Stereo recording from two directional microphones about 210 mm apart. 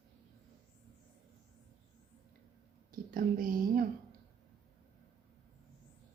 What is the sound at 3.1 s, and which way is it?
Speech, 40° right (ahead or behind).